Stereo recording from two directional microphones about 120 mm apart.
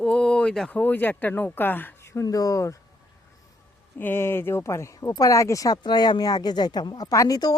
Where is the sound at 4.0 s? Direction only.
20° left (ahead or behind).